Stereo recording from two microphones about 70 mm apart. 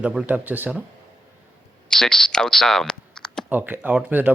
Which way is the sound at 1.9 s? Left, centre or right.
Centre.